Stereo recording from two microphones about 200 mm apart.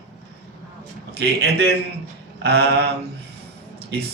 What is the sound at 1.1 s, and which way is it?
A man's voice, 55° right (ahead or behind).